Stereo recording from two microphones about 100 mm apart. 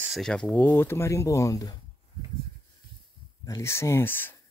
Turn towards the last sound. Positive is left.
turn(degrees=20)  # may be behind; listen again after turning